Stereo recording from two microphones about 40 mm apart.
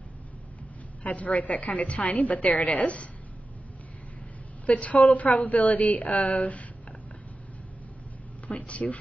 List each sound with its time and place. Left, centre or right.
1.0 s a woman's voice: left
4.6 s a woman's voice: left
8.5 s a woman's voice: left